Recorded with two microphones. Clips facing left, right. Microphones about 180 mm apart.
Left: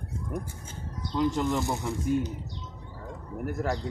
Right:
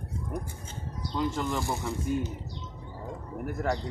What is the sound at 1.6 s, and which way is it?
Speech, 20° left (ahead or behind).